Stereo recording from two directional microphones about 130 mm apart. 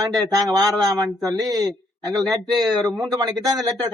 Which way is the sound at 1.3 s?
25° right (ahead or behind).